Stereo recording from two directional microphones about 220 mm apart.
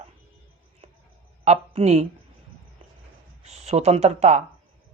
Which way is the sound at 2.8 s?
25° right (ahead or behind).